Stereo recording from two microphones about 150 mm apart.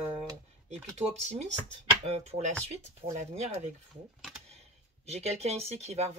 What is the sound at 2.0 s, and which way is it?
Speech, 45° right (ahead or behind).